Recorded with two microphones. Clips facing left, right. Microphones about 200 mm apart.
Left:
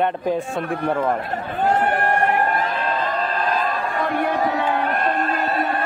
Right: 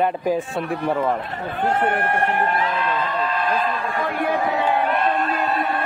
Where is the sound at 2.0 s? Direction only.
40° left (ahead or behind).